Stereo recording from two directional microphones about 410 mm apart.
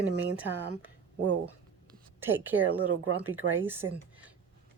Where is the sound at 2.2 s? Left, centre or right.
Centre.